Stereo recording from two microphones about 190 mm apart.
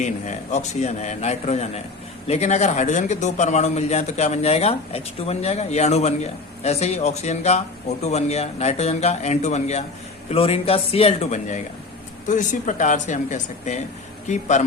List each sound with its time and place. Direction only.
0.0 s speech: 40° left (ahead or behind)